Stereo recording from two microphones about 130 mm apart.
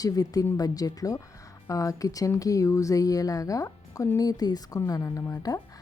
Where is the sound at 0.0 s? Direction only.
30° left (ahead or behind).